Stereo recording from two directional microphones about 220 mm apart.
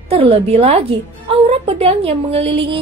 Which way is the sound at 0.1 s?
25° right (ahead or behind).